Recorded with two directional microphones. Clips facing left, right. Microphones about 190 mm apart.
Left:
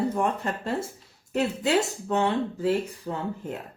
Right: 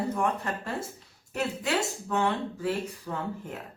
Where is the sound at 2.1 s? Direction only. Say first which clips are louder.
Left 3 dB; 25° left (ahead or behind).